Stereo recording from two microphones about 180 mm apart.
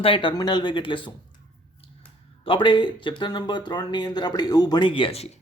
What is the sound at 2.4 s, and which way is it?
Speech, 30° left (ahead or behind).